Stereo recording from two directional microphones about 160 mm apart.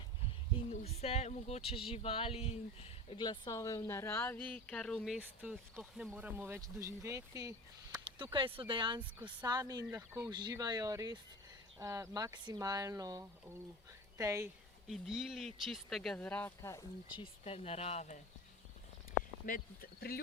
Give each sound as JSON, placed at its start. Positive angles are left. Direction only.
{"t": 0.7, "sound": "speech", "side_deg": 40}
{"t": 3.1, "sound": "speech", "side_deg": 30}
{"t": 5.4, "sound": "speech", "side_deg": -10}
{"t": 8.0, "sound": "speech", "side_deg": -30}
{"t": 9.0, "sound": "speech", "side_deg": -10}
{"t": 9.4, "sound": "speech", "side_deg": -25}
{"t": 14.8, "sound": "speech", "side_deg": 0}
{"t": 16.7, "sound": "speech", "side_deg": 30}
{"t": 19.5, "sound": "speech", "side_deg": 65}